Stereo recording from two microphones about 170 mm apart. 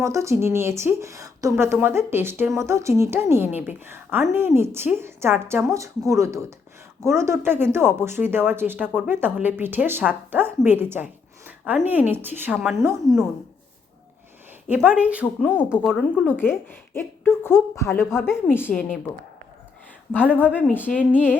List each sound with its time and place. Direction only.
0.0 s a woman's voice: 15° right (ahead or behind)
14.7 s a woman's voice: 10° right (ahead or behind)
15.4 s a woman's voice: 10° left (ahead or behind)
15.8 s speech: centre (ahead or behind)
16.2 s a woman's voice: 10° left (ahead or behind)
20.1 s a woman's voice: 10° left (ahead or behind)